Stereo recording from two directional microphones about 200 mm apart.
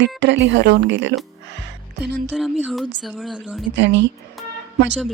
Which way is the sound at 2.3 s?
Centre (ahead or behind).